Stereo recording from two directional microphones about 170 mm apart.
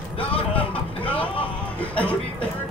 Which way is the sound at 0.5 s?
10° left (ahead or behind).